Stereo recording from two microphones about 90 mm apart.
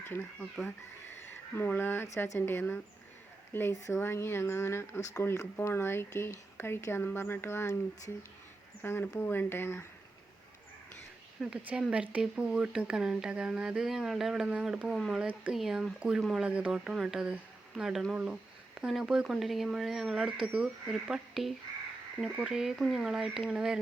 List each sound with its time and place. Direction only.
0.3 s speech: 10° left (ahead or behind)
1.3 s speech: 20° left (ahead or behind)
8.8 s speech: 25° left (ahead or behind)
11.3 s speech: 5° right (ahead or behind)
15.2 s speech: 15° right (ahead or behind)
15.5 s speech: 5° right (ahead or behind)
17.3 s a sound: 5° right (ahead or behind)
18.1 s speech: 10° right (ahead or behind)